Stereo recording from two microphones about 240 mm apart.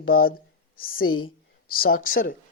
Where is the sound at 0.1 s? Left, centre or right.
Left.